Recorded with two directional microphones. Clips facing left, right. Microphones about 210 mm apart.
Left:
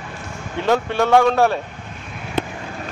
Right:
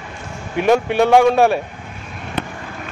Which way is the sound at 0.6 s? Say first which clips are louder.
Right 4 dB; 15° right (ahead or behind).